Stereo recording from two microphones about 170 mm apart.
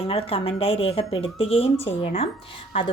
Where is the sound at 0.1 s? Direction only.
35° left (ahead or behind).